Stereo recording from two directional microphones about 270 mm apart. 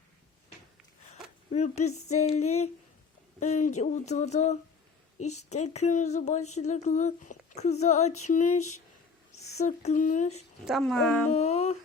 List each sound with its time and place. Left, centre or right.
1.5 s speech: left
10.7 s speech: centre
11.3 s a sound: left